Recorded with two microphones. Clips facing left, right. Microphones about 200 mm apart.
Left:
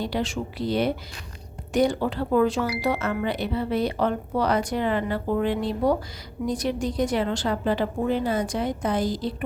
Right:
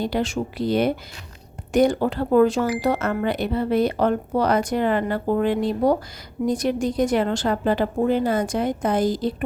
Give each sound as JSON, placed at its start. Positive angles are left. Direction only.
{"t": 0.0, "sound": "speech", "side_deg": -50}